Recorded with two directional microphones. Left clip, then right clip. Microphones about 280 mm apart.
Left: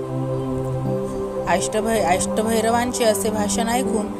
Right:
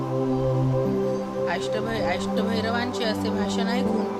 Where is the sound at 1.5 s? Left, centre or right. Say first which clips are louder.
Left 10 dB; left.